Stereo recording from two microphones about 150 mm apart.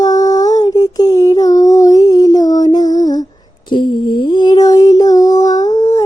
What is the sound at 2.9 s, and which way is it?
Humming, 25° left (ahead or behind).